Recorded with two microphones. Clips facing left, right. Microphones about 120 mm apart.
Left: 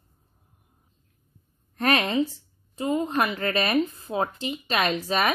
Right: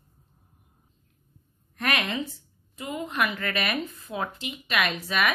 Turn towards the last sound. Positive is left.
turn(degrees=35)  # may be behind; listen again after turning